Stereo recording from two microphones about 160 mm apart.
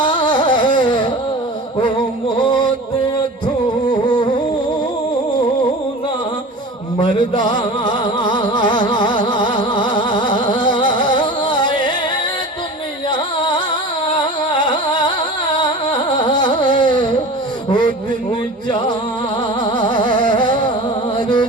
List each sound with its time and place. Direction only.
0.0 s carnatic music: 30° left (ahead or behind)
2.4 s music: 30° left (ahead or behind)
3.8 s a sound: 30° left (ahead or behind)
7.1 s music: 30° left (ahead or behind)
13.1 s carnatic music: 30° left (ahead or behind)
14.5 s music: 30° left (ahead or behind)
19.6 s music: 30° left (ahead or behind)